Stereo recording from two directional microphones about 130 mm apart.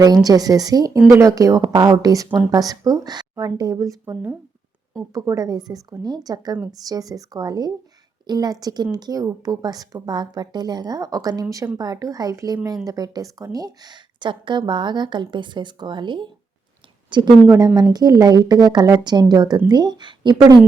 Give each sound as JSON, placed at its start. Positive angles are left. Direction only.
{"t": 0.3, "sound": "a woman's voice", "side_deg": -30}